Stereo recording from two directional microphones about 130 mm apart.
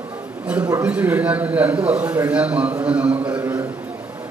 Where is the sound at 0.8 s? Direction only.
10° right (ahead or behind).